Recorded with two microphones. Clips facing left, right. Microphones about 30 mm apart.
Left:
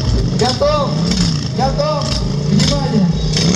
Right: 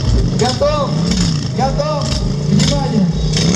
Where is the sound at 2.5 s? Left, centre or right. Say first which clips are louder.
Even; centre.